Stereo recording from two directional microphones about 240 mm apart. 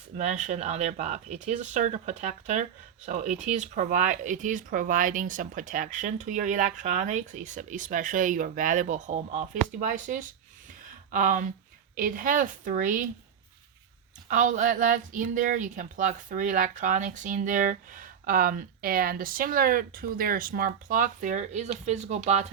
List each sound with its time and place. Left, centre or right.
0.2 s speech: right
14.3 s speech: right